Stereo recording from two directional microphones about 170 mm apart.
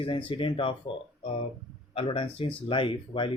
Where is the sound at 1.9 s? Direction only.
35° left (ahead or behind).